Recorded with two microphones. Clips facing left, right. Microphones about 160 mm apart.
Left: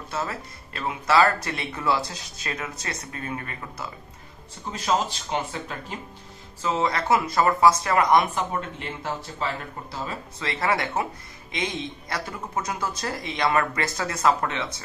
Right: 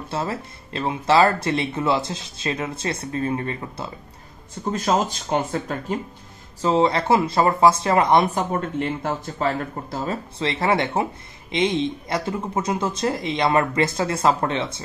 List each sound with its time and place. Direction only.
0.1 s speech: 30° right (ahead or behind)
4.6 s speech: 45° right (ahead or behind)
6.6 s speech: 30° right (ahead or behind)
8.4 s speech: 45° right (ahead or behind)
10.4 s speech: 25° right (ahead or behind)